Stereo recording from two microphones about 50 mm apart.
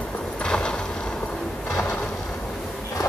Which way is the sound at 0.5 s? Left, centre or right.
Centre.